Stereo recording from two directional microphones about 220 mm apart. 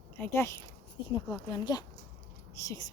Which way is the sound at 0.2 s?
10° left (ahead or behind).